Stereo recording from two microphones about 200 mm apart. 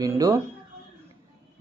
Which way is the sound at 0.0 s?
15° right (ahead or behind).